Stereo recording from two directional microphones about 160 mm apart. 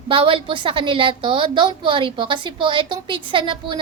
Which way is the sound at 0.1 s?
35° right (ahead or behind).